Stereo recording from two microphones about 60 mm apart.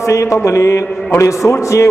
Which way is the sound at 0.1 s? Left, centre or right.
Left.